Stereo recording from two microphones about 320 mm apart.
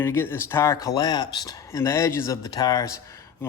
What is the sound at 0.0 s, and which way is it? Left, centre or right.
Speech, centre.